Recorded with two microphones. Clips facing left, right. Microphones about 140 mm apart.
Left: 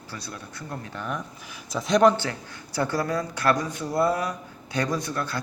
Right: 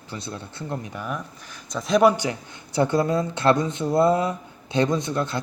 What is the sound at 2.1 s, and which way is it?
Speech, 15° right (ahead or behind).